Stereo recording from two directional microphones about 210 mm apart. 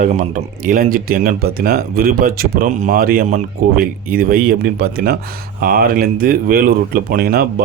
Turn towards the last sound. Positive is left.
turn(degrees=-45)  # may be behind; listen again after turning